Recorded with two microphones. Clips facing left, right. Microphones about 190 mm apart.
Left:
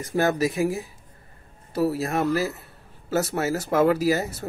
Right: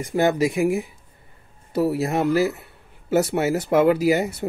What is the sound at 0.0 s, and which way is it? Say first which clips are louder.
Speech: right 3 dB; 20° right (ahead or behind).